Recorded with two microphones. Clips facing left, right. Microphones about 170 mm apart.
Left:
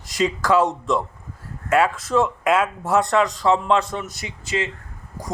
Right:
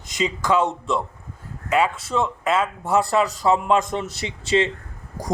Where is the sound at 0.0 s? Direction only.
Centre (ahead or behind).